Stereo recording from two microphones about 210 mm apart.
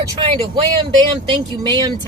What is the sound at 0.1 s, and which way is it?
Speech, 20° right (ahead or behind).